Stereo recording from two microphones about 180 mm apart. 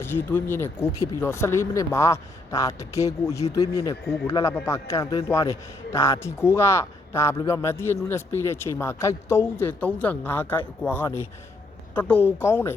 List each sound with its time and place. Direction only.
0.0 s a man's voice: 10° left (ahead or behind)